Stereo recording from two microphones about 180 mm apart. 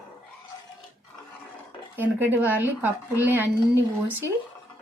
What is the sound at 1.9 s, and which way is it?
Speech, 10° right (ahead or behind).